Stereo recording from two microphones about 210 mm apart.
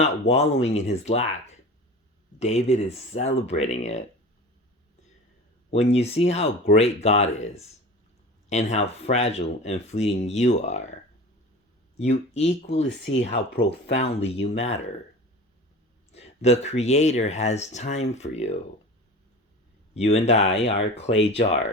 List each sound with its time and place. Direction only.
0.0 s speech: 30° left (ahead or behind)
5.7 s speech: 30° left (ahead or behind)
11.9 s speech: 30° left (ahead or behind)
16.1 s speech: 30° left (ahead or behind)
19.9 s speech: 30° left (ahead or behind)